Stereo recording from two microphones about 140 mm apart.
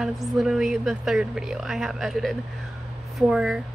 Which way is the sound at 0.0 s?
Centre (ahead or behind).